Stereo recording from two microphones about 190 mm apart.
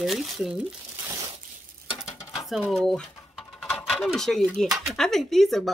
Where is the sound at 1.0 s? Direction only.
20° right (ahead or behind).